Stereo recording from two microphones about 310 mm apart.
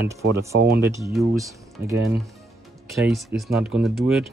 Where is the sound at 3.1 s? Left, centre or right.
Centre.